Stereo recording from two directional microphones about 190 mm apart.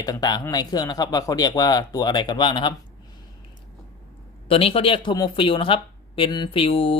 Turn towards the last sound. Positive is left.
turn(degrees=30)  # may be behind; listen again after turning